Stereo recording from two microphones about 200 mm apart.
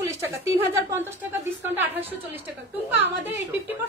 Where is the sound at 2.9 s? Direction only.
10° right (ahead or behind).